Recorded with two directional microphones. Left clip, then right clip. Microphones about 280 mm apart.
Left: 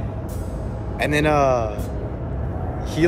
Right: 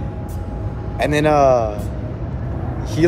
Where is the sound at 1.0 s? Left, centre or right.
Centre.